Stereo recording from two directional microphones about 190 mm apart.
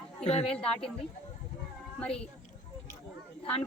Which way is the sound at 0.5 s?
5° left (ahead or behind).